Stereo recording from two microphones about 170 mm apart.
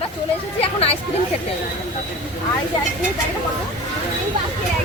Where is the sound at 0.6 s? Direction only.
35° left (ahead or behind).